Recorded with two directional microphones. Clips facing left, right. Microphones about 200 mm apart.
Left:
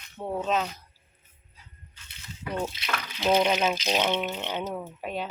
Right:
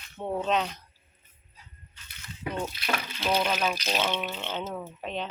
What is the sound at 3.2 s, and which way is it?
Speech, 20° left (ahead or behind).